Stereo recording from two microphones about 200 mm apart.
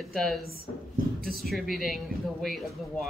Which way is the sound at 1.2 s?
50° right (ahead or behind).